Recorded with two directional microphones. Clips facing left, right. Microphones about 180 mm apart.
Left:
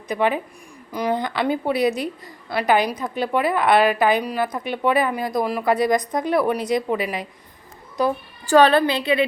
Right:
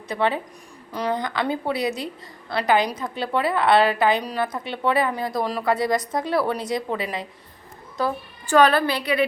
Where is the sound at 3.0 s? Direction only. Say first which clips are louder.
Left 2 dB; 20° left (ahead or behind).